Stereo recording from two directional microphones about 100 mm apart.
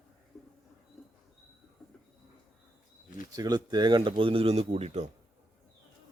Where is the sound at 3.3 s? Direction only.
40° right (ahead or behind); by 5.0 s 90° right.